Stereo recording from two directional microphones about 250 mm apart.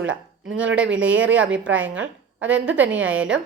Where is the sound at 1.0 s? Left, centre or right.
Right.